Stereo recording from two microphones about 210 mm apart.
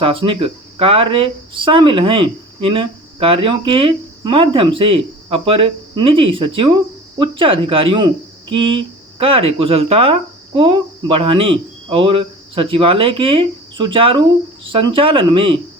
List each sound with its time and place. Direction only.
0.0 s speech: 25° right (ahead or behind)